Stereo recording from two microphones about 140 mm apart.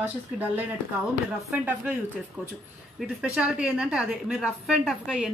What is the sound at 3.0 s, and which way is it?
A woman's voice, 5° right (ahead or behind).